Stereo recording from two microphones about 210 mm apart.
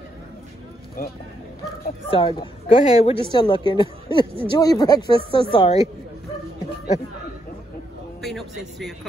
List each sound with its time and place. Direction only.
2.0 s speech: 25° left (ahead or behind)
2.7 s speech: 35° left (ahead or behind)
8.2 s speech: centre (ahead or behind)